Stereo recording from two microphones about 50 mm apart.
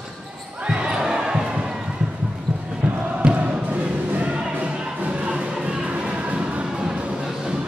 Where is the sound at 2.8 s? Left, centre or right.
Right.